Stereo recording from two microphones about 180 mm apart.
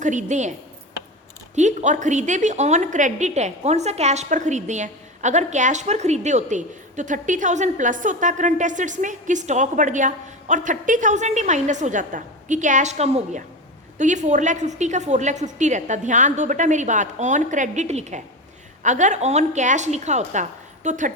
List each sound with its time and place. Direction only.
0.0 s a woman's voice: 45° right (ahead or behind)
1.5 s a woman's voice: 40° right (ahead or behind)